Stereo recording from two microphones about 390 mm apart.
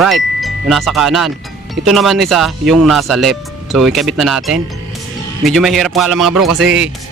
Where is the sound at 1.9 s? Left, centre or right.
Centre.